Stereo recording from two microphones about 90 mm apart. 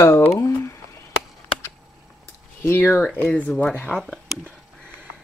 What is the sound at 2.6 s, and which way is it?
Speech, 25° left (ahead or behind).